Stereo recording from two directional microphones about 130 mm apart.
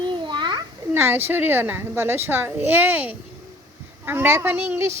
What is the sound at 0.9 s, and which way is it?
A child's voice, 15° right (ahead or behind).